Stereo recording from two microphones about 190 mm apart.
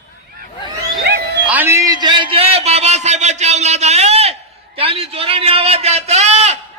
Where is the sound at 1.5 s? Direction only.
10° right (ahead or behind); by 6.6 s 35° right (ahead or behind).